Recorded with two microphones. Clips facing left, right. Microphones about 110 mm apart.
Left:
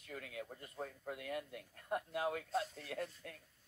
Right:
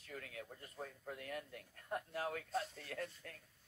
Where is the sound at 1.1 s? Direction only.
5° left (ahead or behind).